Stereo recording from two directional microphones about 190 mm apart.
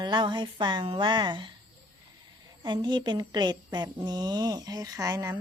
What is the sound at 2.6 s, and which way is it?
Speech, 25° right (ahead or behind).